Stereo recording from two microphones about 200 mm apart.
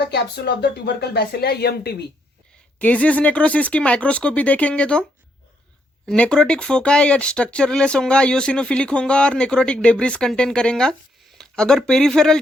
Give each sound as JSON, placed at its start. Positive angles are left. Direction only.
{"t": 0.1, "sound": "speech", "side_deg": 55}
{"t": 2.7, "sound": "speech", "side_deg": 5}
{"t": 6.1, "sound": "speech", "side_deg": 5}
{"t": 11.3, "sound": "a sound", "side_deg": 5}
{"t": 11.9, "sound": "speech", "side_deg": 0}